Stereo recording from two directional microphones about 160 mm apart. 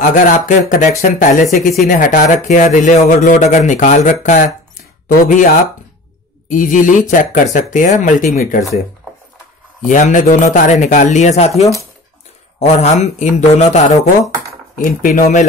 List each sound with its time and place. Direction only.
0.0 s speech: 55° left (ahead or behind)
4.7 s a sound: 60° left (ahead or behind)
6.5 s speech: 55° left (ahead or behind)
9.8 s speech: 50° left (ahead or behind)
14.8 s speech: 60° left (ahead or behind)